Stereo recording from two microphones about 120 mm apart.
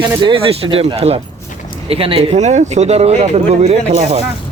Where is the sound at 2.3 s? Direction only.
75° right (ahead or behind).